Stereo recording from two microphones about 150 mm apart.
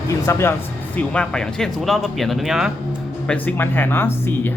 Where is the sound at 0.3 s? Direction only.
15° left (ahead or behind).